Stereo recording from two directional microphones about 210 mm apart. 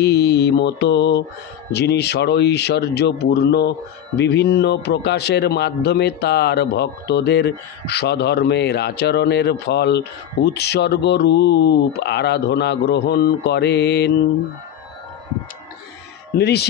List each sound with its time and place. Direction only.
0.0 s mantra: 50° left (ahead or behind)
1.7 s a man's voice: 50° left (ahead or behind)
16.3 s a man's voice: 50° left (ahead or behind)